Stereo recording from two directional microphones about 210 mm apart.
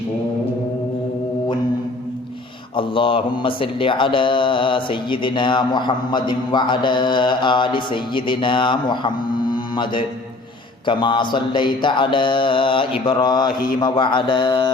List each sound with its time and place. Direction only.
2.7 s speech: 25° left (ahead or behind)